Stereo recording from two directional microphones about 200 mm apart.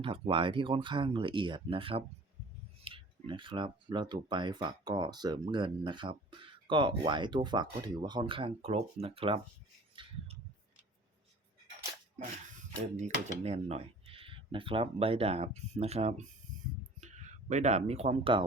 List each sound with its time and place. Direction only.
0.0 s speech: 25° right (ahead or behind)
9.9 s a sound: 25° right (ahead or behind)
13.0 s speech: 35° right (ahead or behind)